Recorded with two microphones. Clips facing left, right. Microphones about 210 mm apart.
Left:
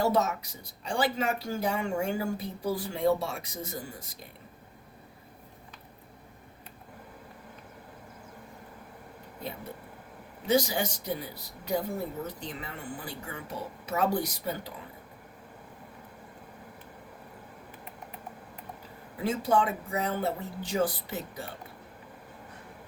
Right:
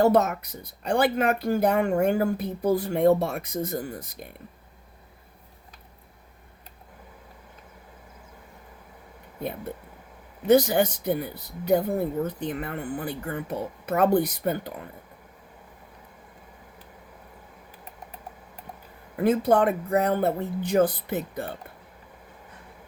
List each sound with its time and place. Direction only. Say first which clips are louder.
0.0 s speech: right 6 dB; 55° right (ahead or behind)
10.4 s speech: right 8 dB; 55° right (ahead or behind)
19.1 s speech: right 6 dB; 55° right (ahead or behind)